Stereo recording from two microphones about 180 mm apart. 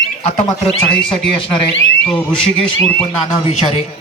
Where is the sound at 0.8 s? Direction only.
5° left (ahead or behind).